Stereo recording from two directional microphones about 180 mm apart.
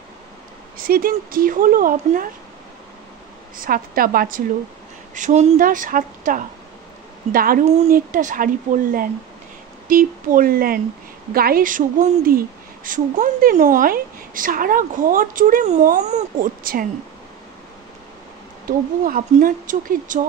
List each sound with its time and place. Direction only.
0.7 s speech: 55° right (ahead or behind)
3.5 s speech: 55° right (ahead or behind)
5.1 s speech: 40° right (ahead or behind)
7.6 s speech: 35° right (ahead or behind)
7.9 s speech: 45° right (ahead or behind)
9.8 s speech: 50° right (ahead or behind)
18.7 s speech: 50° right (ahead or behind)